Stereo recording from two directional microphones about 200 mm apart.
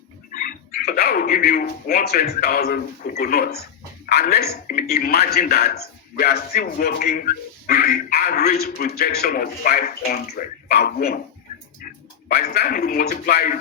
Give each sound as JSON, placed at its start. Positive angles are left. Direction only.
{"t": 0.3, "sound": "speech", "side_deg": 45}
{"t": 12.3, "sound": "speech", "side_deg": 55}